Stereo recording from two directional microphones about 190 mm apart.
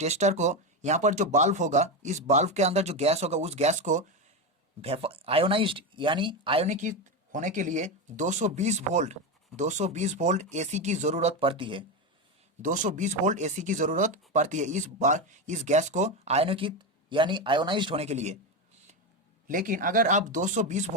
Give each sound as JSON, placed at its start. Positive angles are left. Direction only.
{"t": 0.0, "sound": "speech", "side_deg": -35}
{"t": 12.6, "sound": "speech", "side_deg": -45}
{"t": 19.5, "sound": "speech", "side_deg": -45}